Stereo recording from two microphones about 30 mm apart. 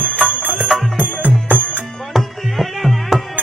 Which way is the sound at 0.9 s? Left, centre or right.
Right.